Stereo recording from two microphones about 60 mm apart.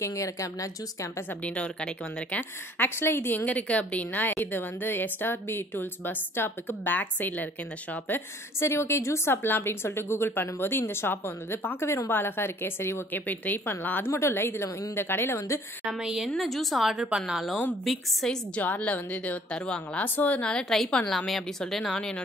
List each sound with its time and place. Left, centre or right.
0.0 s speech: left
1.4 s a woman's voice: centre
2.8 s a woman's voice: left
3.4 s a woman's voice: left
8.5 s a woman's voice: left
13.1 s a woman's voice: left
15.8 s a woman's voice: centre
16.3 s a woman's voice: centre
18.2 s speech: centre
18.6 s a woman's voice: left
20.7 s a woman's voice: centre